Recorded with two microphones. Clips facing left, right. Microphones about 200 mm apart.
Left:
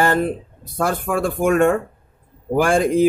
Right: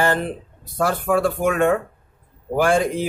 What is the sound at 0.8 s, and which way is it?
Speech, 50° left (ahead or behind).